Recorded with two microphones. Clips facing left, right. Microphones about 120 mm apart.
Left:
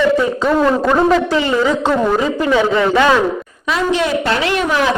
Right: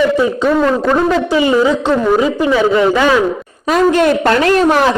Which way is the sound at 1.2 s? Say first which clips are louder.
Right 3 dB; 15° right (ahead or behind).